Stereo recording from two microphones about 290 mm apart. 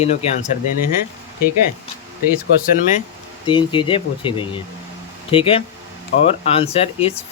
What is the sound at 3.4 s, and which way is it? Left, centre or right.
Speech, centre.